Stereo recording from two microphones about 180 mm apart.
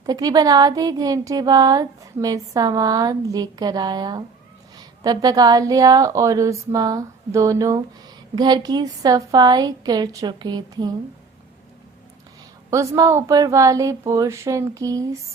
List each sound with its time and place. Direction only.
0.0 s speech: 20° right (ahead or behind)
12.7 s a woman's voice: 15° right (ahead or behind)